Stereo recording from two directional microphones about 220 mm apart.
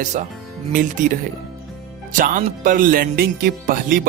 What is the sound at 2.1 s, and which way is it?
Speech, 35° right (ahead or behind).